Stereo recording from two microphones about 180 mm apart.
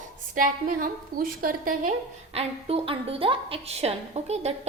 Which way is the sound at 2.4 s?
35° right (ahead or behind).